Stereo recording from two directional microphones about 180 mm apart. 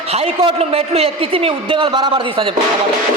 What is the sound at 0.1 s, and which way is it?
A man's voice, 35° right (ahead or behind).